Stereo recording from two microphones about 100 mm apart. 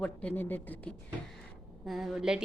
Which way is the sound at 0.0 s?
15° left (ahead or behind).